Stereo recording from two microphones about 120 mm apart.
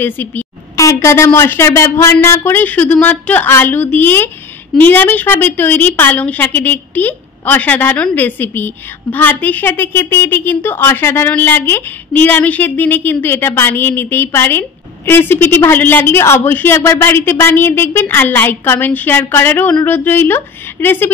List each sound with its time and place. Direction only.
0.0 s a woman's voice: 15° left (ahead or behind)